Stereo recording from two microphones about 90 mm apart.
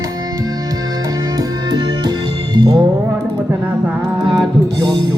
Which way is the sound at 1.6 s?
50° right (ahead or behind).